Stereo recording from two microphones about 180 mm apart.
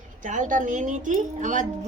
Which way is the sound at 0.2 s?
45° right (ahead or behind).